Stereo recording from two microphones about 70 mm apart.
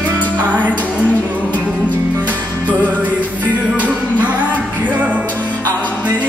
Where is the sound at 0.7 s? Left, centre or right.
Centre.